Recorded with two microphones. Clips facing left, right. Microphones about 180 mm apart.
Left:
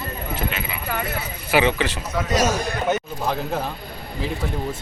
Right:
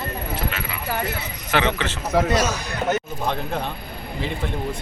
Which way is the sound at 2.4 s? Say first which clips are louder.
Left 3 dB; 45° left (ahead or behind).